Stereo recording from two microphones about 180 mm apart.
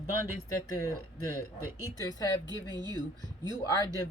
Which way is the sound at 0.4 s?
15° left (ahead or behind).